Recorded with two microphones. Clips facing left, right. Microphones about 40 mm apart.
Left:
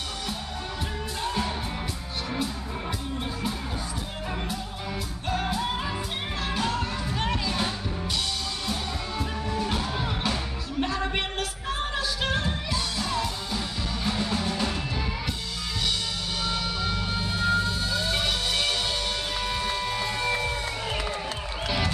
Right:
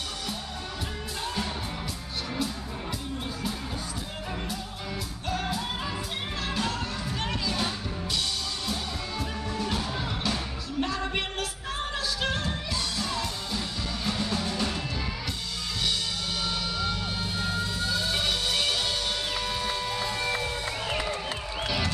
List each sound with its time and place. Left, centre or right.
1.2 s music: centre
5.3 s music: centre
9.5 s music: centre
16.4 s music: centre
21.6 s a sound: centre